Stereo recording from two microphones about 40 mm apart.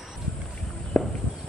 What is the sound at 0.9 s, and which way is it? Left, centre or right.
Walk, left.